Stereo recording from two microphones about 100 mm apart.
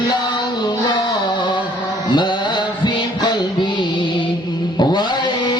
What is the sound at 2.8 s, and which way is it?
Music, 45° left (ahead or behind).